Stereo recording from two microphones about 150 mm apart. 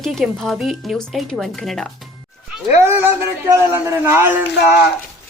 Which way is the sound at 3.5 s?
15° right (ahead or behind).